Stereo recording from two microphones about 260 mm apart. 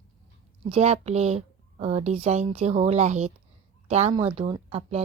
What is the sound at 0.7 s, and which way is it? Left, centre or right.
A woman's voice, right.